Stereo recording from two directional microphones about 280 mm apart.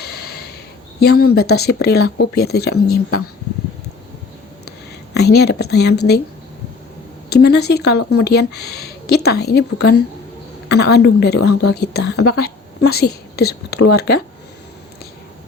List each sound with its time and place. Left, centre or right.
0.0 s a sound: left
0.9 s a woman's voice: left
5.1 s a woman's voice: left
7.3 s a woman's voice: left
10.7 s a woman's voice: left